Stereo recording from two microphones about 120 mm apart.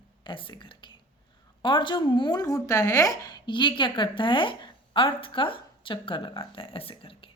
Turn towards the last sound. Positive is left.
turn(degrees=50)  # may be behind; listen again after turning